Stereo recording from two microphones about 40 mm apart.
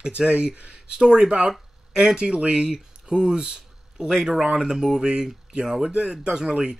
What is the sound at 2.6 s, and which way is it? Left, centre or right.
Speech, centre.